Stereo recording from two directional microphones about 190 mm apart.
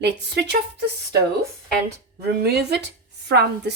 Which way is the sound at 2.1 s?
55° right (ahead or behind).